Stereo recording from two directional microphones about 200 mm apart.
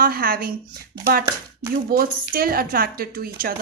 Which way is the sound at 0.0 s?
45° right (ahead or behind).